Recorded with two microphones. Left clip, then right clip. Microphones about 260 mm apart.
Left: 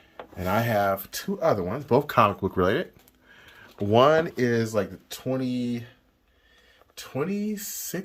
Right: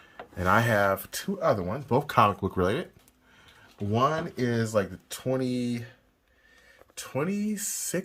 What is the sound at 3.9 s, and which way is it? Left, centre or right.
Speech, centre.